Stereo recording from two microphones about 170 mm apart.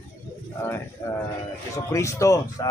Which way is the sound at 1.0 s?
15° left (ahead or behind).